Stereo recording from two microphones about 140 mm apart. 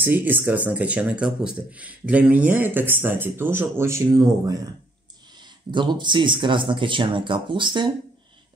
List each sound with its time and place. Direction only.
0.0 s speech: 15° right (ahead or behind); by 7.9 s 35° right (ahead or behind)